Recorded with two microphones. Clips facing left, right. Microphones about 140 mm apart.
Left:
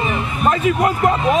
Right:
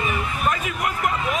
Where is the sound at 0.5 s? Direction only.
30° left (ahead or behind).